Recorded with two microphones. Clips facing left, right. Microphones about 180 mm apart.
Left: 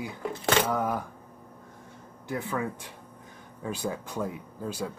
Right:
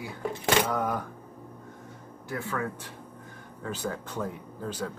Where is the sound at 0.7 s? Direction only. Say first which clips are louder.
Left 1 dB; 10° left (ahead or behind).